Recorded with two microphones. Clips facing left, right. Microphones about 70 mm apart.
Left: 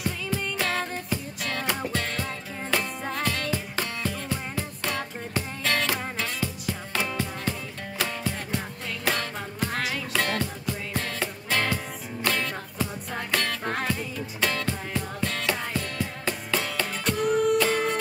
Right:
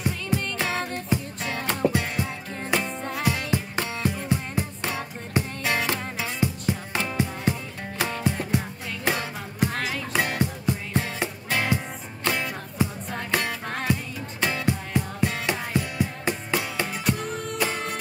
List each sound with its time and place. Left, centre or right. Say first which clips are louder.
0.0 s music: right 2 dB; centre
9.7 s music: even; centre
10.1 s music: right 2 dB; centre
17.2 s music: left 7 dB; centre